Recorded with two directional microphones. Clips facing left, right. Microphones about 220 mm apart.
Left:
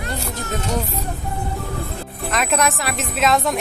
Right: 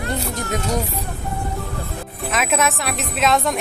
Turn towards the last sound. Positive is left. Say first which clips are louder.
# even
turn(degrees=0)  # may be behind; listen again after turning